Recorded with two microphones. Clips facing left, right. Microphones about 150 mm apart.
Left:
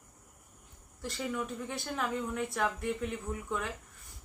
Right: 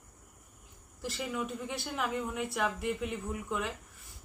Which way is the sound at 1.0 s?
5° right (ahead or behind).